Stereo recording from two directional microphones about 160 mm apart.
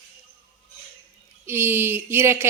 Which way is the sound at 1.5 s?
15° right (ahead or behind).